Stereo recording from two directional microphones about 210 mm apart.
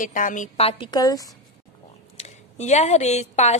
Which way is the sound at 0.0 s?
40° left (ahead or behind).